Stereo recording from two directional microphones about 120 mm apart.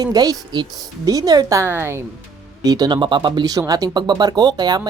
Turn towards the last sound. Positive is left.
turn(degrees=-35)  # may be behind; listen again after turning